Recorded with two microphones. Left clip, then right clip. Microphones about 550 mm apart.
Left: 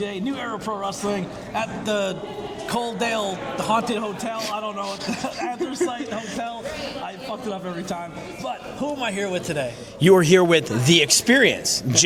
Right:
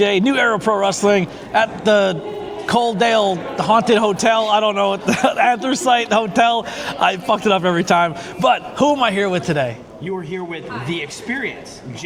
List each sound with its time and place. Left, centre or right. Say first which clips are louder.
0.0 s speech: right 13 dB; right
5.7 s a man's voice: right 11 dB; right
9.0 s speech: right 7 dB; right
10.0 s a man's voice: left 12 dB; left